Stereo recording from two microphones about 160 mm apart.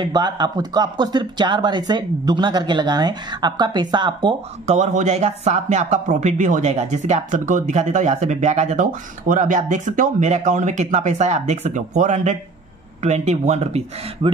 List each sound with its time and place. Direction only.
0.0 s speech: 25° right (ahead or behind)
4.6 s speech: 45° right (ahead or behind)